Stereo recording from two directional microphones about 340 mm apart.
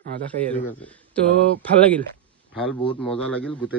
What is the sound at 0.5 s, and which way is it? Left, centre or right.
A man's voice, centre.